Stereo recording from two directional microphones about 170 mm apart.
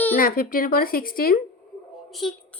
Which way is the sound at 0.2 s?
55° left (ahead or behind).